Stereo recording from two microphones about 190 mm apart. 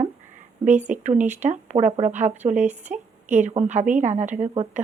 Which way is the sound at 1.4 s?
35° right (ahead or behind).